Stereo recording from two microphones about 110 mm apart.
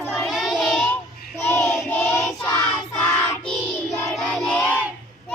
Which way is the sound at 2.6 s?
10° left (ahead or behind).